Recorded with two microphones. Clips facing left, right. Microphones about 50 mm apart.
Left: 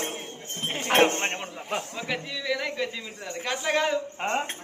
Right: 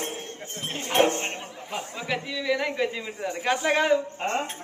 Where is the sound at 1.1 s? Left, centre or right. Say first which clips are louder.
Even; left.